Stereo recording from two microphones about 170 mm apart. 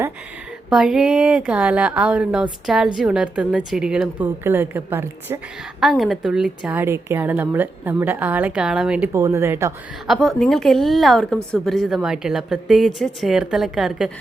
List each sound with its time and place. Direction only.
0.7 s a woman's voice: 5° right (ahead or behind)
5.8 s a woman's voice: centre (ahead or behind)
9.1 s a woman's voice: 15° right (ahead or behind)
10.1 s speech: centre (ahead or behind)